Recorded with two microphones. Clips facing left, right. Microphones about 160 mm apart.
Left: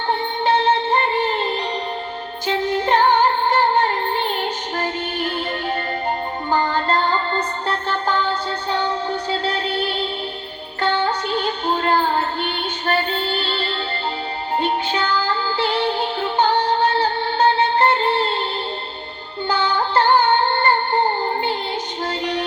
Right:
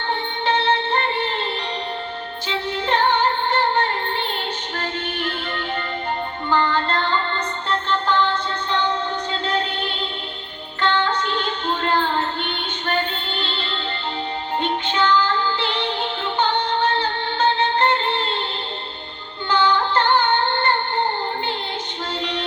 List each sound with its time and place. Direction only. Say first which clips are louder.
0.4 s music: left 3 dB; 45° left (ahead or behind)
2.5 s music: left 5 dB; 45° left (ahead or behind)
6.5 s music: left 1 dB; 40° left (ahead or behind)
9.3 s music: left 3 dB; 35° left (ahead or behind)
10.8 s music: left 1 dB; 40° left (ahead or behind)
19.5 s music: right 2 dB; 40° left (ahead or behind)
22.2 s music: left 3 dB; 40° left (ahead or behind)